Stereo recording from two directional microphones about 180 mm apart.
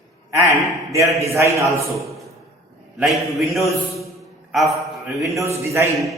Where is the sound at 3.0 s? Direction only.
Centre (ahead or behind).